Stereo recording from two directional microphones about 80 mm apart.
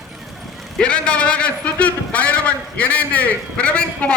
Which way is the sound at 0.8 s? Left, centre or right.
Centre.